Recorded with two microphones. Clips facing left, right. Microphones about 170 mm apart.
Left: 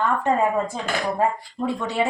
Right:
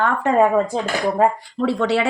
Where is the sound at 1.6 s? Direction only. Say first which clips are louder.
Right 5 dB; 80° right.